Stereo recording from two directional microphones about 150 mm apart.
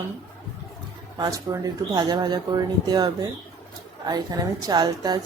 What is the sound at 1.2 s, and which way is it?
A woman's voice, 20° right (ahead or behind).